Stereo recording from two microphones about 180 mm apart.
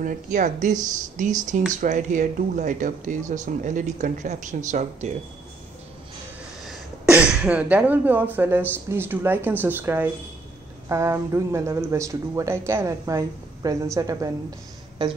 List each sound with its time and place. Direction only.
0.0 s speech: 45° right (ahead or behind)
6.6 s speech: 5° right (ahead or behind)